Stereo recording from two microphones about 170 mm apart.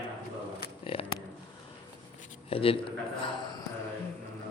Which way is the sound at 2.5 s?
35° left (ahead or behind).